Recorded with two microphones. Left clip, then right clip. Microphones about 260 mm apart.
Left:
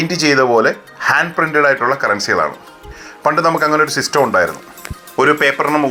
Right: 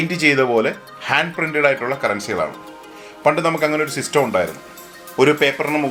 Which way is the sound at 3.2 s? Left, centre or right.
Centre.